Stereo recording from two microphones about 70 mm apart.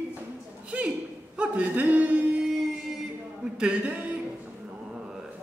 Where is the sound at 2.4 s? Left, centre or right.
Centre.